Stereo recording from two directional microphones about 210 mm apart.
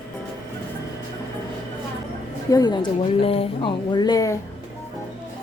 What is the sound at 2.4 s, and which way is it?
A woman's voice, 20° left (ahead or behind).